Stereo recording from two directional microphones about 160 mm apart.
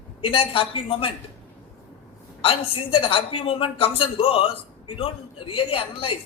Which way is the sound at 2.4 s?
35° left (ahead or behind).